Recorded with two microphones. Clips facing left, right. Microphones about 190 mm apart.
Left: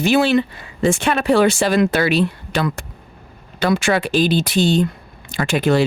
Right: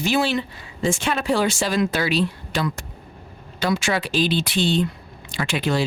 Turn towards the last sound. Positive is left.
turn(degrees=50)  # may be behind; listen again after turning